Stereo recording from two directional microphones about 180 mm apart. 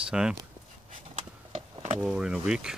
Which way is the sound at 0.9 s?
35° right (ahead or behind).